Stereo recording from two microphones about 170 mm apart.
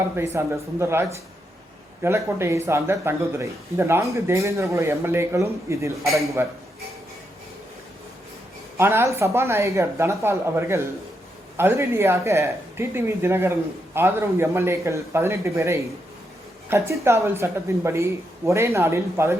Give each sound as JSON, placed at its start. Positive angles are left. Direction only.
{"t": 0.3, "sound": "speech", "side_deg": -15}
{"t": 8.8, "sound": "speech", "side_deg": -15}